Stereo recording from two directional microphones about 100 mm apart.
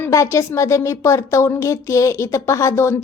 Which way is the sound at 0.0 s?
30° left (ahead or behind).